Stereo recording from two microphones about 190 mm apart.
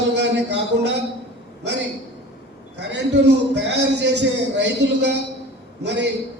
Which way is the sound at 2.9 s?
65° right (ahead or behind).